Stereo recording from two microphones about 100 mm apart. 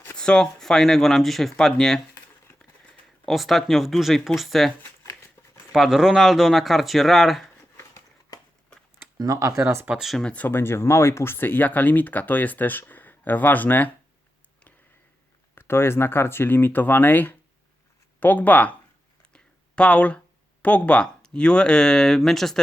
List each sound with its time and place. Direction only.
0.2 s speech: 5° left (ahead or behind)
3.2 s speech: centre (ahead or behind)
5.7 s speech: 5° right (ahead or behind)
8.3 s a sound: 40° left (ahead or behind)
9.1 s speech: 35° right (ahead or behind)
9.6 s speech: 25° right (ahead or behind)
9.9 s speech: centre (ahead or behind); by 13.9 s 15° left (ahead or behind)
15.5 s speech: 25° left (ahead or behind); by 22.6 s 5° left (ahead or behind)